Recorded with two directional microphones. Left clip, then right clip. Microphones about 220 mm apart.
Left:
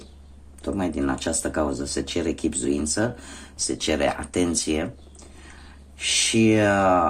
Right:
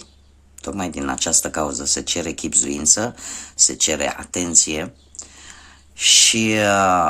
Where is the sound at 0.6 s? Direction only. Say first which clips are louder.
Right 1 dB; 35° right (ahead or behind).